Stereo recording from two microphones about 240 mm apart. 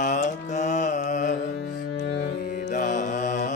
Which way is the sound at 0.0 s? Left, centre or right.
Left.